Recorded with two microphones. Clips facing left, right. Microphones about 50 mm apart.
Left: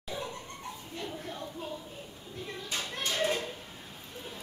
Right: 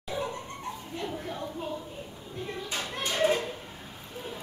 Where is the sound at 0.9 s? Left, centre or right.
Centre.